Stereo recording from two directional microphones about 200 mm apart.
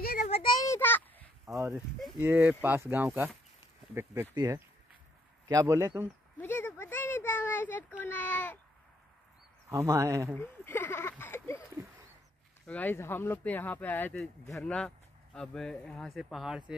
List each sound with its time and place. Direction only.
0.0 s child singing: 50° left (ahead or behind)
0.3 s child singing: 20° left (ahead or behind)
1.4 s a sound: 15° right (ahead or behind)
2.1 s speech: 10° right (ahead or behind)
6.4 s a sound: 10° left (ahead or behind)
9.7 s speech: 15° right (ahead or behind)
10.3 s speech: 10° left (ahead or behind)
12.6 s speech: 10° left (ahead or behind)